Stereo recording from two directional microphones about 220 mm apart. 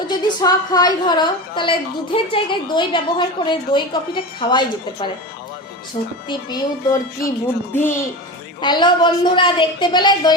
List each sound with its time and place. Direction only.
0.1 s a woman's voice: 20° left (ahead or behind)
6.2 s a woman's voice: 20° left (ahead or behind)